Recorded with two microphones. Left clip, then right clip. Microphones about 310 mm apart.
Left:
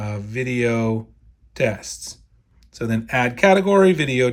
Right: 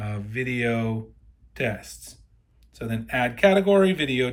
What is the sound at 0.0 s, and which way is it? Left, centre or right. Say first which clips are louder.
Speech: left 3 dB; centre.